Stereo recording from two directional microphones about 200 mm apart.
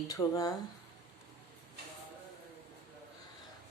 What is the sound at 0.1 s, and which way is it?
Speech, 15° left (ahead or behind).